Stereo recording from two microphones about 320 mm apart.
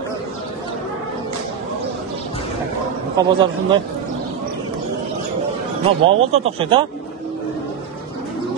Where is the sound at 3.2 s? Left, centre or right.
Centre.